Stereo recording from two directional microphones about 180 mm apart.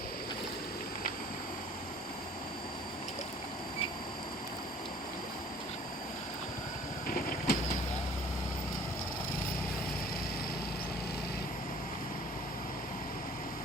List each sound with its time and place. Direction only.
7.1 s vehicle: 55° left (ahead or behind)